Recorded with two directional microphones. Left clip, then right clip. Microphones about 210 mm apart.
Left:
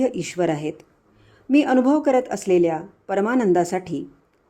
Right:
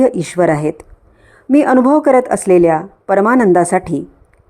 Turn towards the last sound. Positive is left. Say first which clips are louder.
# right 9 dB
turn(degrees=-15)  # may be behind; listen again after turning